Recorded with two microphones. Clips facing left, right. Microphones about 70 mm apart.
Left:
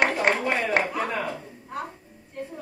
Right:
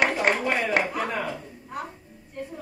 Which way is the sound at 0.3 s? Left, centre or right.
Left.